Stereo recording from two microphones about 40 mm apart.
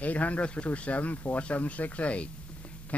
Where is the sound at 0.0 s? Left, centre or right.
Left.